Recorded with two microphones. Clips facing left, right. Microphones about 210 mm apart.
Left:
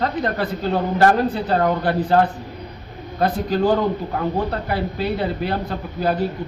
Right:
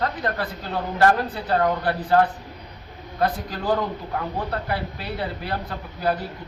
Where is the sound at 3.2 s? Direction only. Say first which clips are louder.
Left 6 dB; 25° left (ahead or behind).